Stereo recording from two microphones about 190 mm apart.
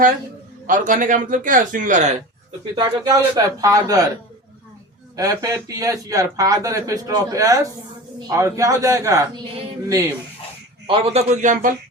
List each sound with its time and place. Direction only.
0.7 s a man's voice: 45° right (ahead or behind)
2.7 s a man's voice: 20° right (ahead or behind)
5.1 s a man's voice: 20° right (ahead or behind)
10.8 s a man's voice: 30° right (ahead or behind)